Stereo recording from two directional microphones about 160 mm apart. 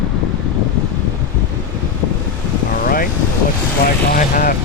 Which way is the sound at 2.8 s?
60° left (ahead or behind).